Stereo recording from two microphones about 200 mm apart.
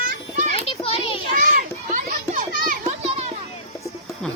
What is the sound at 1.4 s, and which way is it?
Children playing, 40° right (ahead or behind).